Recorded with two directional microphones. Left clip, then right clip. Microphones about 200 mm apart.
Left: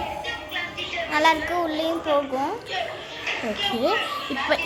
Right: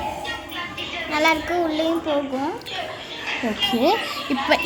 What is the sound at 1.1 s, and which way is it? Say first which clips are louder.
Speech: right 1 dB; 10° left (ahead or behind).